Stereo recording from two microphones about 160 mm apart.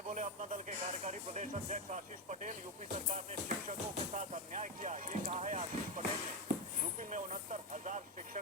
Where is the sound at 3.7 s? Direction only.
50° right (ahead or behind).